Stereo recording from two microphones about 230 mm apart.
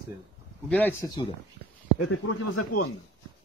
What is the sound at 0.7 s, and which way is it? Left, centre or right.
Speech, centre.